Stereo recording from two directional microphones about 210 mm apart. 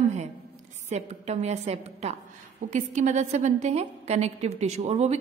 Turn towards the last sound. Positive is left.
turn(degrees=-30)  # may be behind; listen again after turning